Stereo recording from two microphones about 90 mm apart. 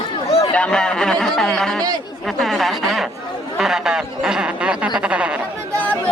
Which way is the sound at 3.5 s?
5° right (ahead or behind).